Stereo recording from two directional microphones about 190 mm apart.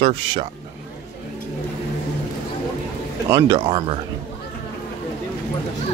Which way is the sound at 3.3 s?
25° right (ahead or behind).